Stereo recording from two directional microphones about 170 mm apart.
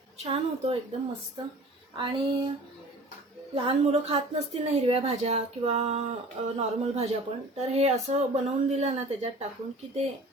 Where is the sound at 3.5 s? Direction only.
35° right (ahead or behind).